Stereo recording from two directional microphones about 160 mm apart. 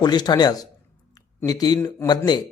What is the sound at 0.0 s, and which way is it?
Speech, 25° left (ahead or behind).